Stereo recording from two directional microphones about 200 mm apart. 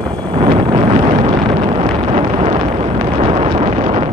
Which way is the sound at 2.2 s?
30° right (ahead or behind).